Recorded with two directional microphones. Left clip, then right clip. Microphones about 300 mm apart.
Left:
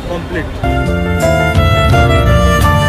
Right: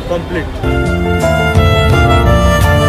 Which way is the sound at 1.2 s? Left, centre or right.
Centre.